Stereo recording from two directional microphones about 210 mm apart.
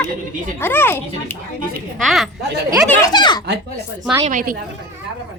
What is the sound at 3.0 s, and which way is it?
Speech, 20° left (ahead or behind).